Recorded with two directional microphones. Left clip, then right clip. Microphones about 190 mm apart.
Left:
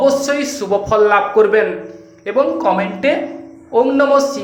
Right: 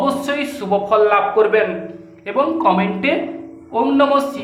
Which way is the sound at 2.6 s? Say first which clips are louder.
Left 1 dB; 20° left (ahead or behind).